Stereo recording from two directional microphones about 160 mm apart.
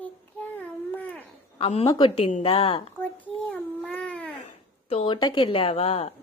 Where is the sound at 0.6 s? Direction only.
10° left (ahead or behind).